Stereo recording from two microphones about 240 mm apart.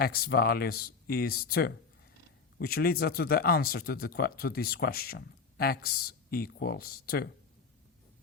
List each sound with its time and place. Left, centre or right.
0.0 s speech: left